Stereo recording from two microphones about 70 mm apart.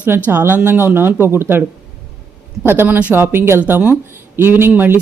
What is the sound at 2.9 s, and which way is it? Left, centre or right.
Speech, right.